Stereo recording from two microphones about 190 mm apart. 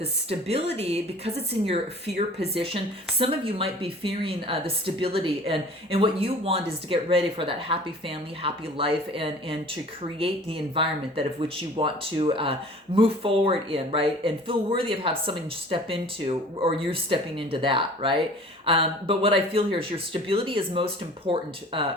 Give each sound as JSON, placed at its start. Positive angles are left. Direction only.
{"t": 0.0, "sound": "a woman's voice", "side_deg": -30}